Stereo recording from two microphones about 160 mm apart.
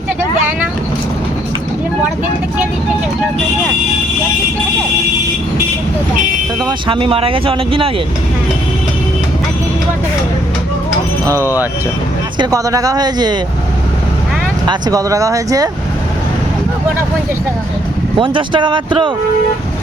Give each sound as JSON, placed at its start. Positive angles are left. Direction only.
{"t": 6.7, "sound": "speech", "side_deg": -30}
{"t": 12.4, "sound": "speech", "side_deg": -20}
{"t": 14.7, "sound": "speech", "side_deg": -25}
{"t": 18.2, "sound": "speech", "side_deg": -30}